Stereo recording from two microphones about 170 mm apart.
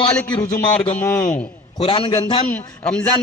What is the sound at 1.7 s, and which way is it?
Speech, 30° left (ahead or behind).